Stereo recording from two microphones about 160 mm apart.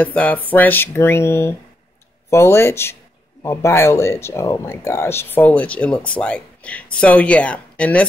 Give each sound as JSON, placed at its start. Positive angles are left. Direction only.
{"t": 0.0, "sound": "speech", "side_deg": 10}